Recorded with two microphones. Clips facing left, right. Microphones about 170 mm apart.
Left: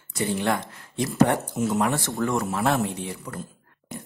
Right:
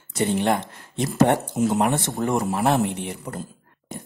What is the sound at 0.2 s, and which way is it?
Speech, 25° right (ahead or behind).